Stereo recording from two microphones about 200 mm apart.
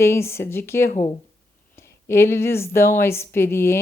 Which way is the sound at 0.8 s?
35° left (ahead or behind).